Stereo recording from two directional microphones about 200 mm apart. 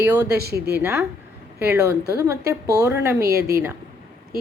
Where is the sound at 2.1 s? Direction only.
15° right (ahead or behind).